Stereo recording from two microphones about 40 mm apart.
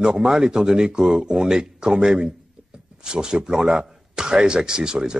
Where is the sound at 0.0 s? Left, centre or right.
Centre.